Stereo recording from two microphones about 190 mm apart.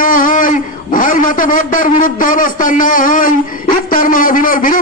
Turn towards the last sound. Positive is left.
turn(degrees=45)  # may be behind; listen again after turning